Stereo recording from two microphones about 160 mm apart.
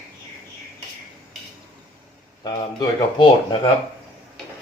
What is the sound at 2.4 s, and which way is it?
Speech, 30° left (ahead or behind).